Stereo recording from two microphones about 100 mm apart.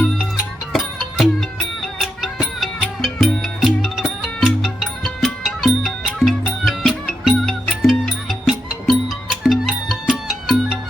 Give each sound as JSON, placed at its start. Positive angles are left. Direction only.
{"t": 0.7, "sound": "music", "side_deg": 0}
{"t": 2.6, "sound": "music", "side_deg": 0}